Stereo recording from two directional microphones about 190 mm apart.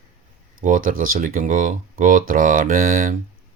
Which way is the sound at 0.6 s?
45° right (ahead or behind).